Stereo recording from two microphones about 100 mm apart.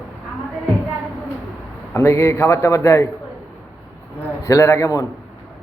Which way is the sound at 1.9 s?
25° left (ahead or behind).